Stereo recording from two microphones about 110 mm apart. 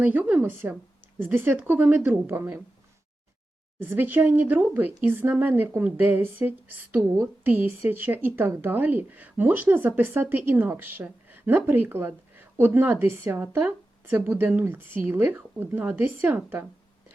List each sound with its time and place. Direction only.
0.0 s speech: 15° right (ahead or behind)
3.8 s speech: 20° right (ahead or behind)